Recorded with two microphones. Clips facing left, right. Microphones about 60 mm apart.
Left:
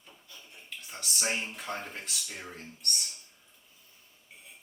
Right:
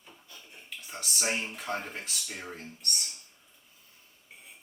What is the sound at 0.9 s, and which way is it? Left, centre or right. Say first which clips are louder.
Speech: right 1 dB; centre.